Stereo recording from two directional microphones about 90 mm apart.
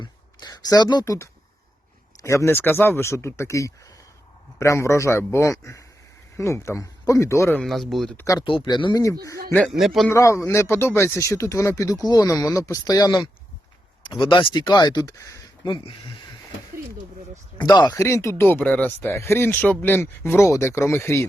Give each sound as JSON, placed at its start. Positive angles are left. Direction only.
{"t": 0.0, "sound": "a sound", "side_deg": 50}
{"t": 1.0, "sound": "speech", "side_deg": 35}
{"t": 7.6, "sound": "a man's voice", "side_deg": 0}
{"t": 9.0, "sound": "speech", "side_deg": 40}
{"t": 9.6, "sound": "a man's voice", "side_deg": 0}
{"t": 10.1, "sound": "speech", "side_deg": 35}
{"t": 14.0, "sound": "speech", "side_deg": 65}
{"t": 14.5, "sound": "speech", "side_deg": 45}
{"t": 15.6, "sound": "speech", "side_deg": 65}
{"t": 17.6, "sound": "speech", "side_deg": 50}
{"t": 17.9, "sound": "speech", "side_deg": 30}
{"t": 19.0, "sound": "speech", "side_deg": 30}